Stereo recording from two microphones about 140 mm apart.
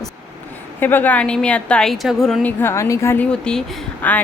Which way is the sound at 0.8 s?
15° left (ahead or behind).